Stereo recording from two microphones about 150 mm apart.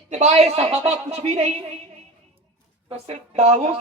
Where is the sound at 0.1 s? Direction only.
50° right (ahead or behind).